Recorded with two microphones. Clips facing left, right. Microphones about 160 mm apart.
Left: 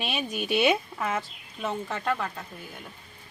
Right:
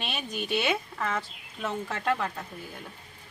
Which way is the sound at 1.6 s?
Centre (ahead or behind).